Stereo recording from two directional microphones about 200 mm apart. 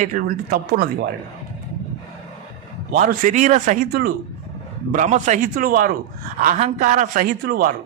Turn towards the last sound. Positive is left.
turn(degrees=-50)  # may be behind; listen again after turning